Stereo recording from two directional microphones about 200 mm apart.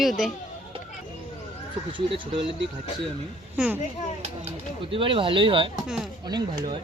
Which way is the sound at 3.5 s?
5° right (ahead or behind).